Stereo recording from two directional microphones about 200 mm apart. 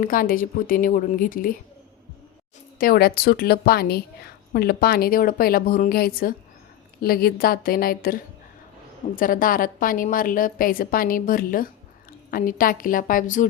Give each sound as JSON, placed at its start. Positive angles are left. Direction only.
{"t": 0.0, "sound": "a woman's voice", "side_deg": 45}
{"t": 2.7, "sound": "a woman's voice", "side_deg": 45}